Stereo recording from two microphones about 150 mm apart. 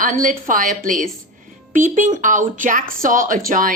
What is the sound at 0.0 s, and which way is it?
A woman's voice, 60° right (ahead or behind).